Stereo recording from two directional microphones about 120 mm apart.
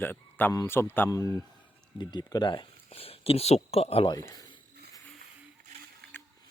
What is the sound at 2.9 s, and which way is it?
Speech, 55° left (ahead or behind).